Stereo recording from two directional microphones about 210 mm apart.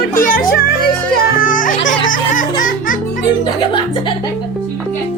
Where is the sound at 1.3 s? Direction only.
40° left (ahead or behind).